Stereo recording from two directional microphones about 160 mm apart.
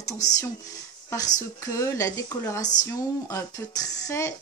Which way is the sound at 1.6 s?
20° left (ahead or behind).